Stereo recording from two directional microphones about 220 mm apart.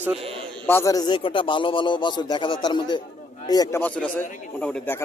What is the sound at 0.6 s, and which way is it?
A man's voice, 10° left (ahead or behind).